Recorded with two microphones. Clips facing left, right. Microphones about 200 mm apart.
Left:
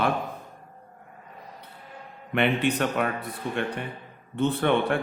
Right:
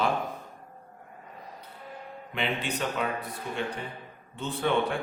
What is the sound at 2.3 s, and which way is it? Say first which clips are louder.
Speech: left 8 dB; 60° left (ahead or behind).